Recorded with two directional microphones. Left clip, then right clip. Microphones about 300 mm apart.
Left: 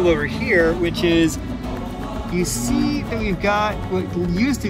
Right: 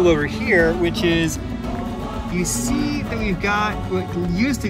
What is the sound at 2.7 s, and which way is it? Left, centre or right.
Speech, left.